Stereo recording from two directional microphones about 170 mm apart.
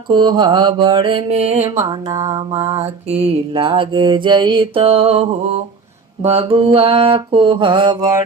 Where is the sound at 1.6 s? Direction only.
20° right (ahead or behind).